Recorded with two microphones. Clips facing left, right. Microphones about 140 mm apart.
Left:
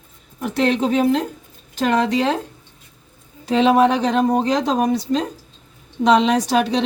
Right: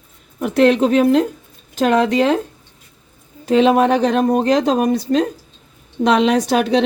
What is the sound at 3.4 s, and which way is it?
A woman's voice, 50° right (ahead or behind).